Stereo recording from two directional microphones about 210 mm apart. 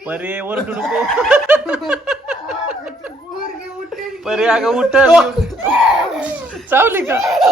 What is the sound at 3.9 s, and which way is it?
Speech, centre (ahead or behind).